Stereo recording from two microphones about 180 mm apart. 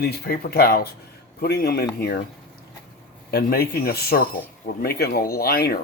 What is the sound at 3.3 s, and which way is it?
Speech, 60° left (ahead or behind).